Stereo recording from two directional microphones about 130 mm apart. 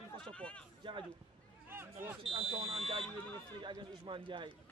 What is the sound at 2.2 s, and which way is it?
A man's voice, 45° right (ahead or behind).